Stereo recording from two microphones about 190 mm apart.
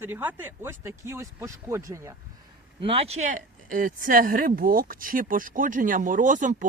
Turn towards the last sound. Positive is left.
turn(degrees=-45)  # may be behind; listen again after turning